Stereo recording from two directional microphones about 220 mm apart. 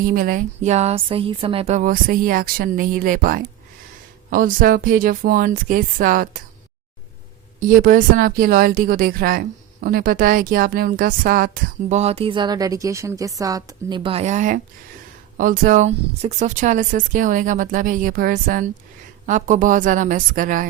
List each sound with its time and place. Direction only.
0.0 s speech: 40° right (ahead or behind)
7.8 s speech: 40° right (ahead or behind)